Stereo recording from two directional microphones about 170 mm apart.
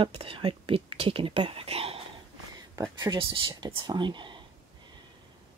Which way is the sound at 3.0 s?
25° right (ahead or behind).